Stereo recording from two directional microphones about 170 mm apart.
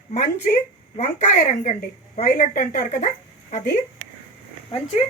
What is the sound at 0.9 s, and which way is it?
A woman's voice, 40° left (ahead or behind).